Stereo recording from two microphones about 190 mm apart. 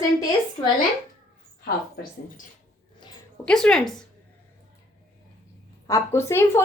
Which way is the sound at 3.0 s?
25° left (ahead or behind).